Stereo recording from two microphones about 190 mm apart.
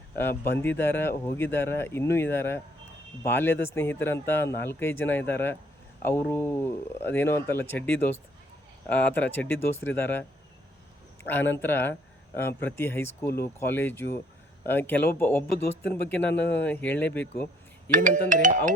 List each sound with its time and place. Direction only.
0.6 s speech: 10° left (ahead or behind)
17.9 s speech: 45° right (ahead or behind)